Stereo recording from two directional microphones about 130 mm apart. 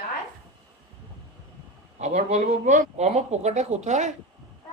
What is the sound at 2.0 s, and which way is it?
Speech, 60° right (ahead or behind).